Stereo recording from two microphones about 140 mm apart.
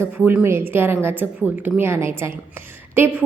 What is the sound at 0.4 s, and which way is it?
A woman's voice, 15° right (ahead or behind).